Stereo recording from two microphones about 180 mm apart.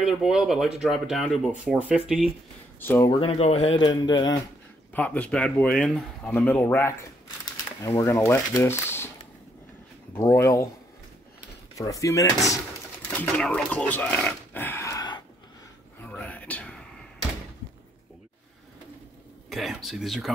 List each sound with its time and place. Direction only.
0.0 s speech: 5° right (ahead or behind)
2.8 s speech: 10° left (ahead or behind)
3.2 s speech: 35° left (ahead or behind)
3.8 s speech: 25° left (ahead or behind)
4.9 s speech: 10° left (ahead or behind)
10.1 s speech: 15° left (ahead or behind)
11.8 s speech: 15° left (ahead or behind)
16.1 s whispering: 10° left (ahead or behind)
19.5 s speech: centre (ahead or behind)